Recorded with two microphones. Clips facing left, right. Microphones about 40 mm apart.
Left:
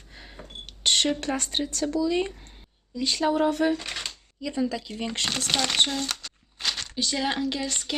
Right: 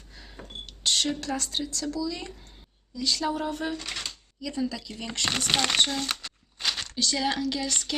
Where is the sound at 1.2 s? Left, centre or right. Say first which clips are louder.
Left 3 dB; left.